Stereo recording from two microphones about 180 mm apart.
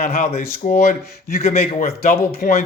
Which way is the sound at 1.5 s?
50° left (ahead or behind).